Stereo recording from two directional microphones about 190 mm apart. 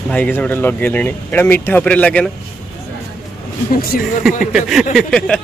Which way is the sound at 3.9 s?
45° left (ahead or behind).